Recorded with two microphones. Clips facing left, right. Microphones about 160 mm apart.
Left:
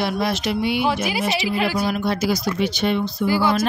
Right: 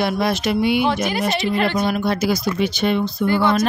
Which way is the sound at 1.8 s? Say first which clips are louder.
Right 2 dB; 55° right (ahead or behind).